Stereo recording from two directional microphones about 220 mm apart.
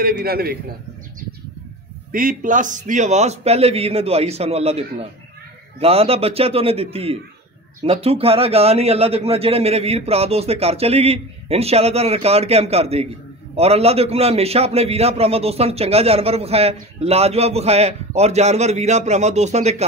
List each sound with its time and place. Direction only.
0.2 s a man's voice: 45° right (ahead or behind)
2.1 s a man's voice: 40° right (ahead or behind)